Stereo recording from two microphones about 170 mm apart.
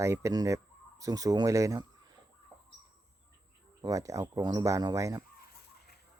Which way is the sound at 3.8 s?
20° right (ahead or behind).